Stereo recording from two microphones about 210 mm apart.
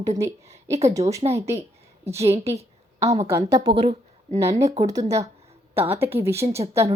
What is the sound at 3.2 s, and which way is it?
A woman's voice, 15° right (ahead or behind).